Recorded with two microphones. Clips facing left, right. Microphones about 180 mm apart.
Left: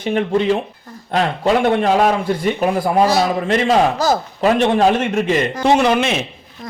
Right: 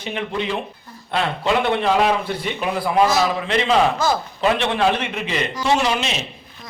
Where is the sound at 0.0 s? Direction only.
45° left (ahead or behind).